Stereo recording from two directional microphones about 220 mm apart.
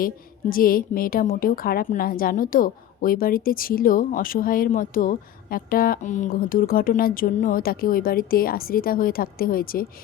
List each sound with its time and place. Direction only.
0.5 s a woman's voice: 40° left (ahead or behind)